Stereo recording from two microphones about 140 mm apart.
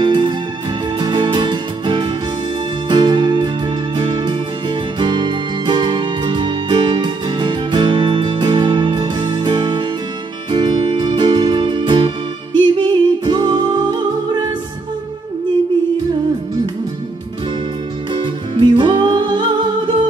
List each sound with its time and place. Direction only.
0.0 s music: 35° right (ahead or behind)
18.1 s music: 35° right (ahead or behind)